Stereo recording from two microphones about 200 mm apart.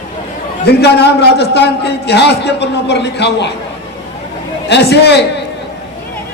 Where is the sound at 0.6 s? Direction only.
55° left (ahead or behind).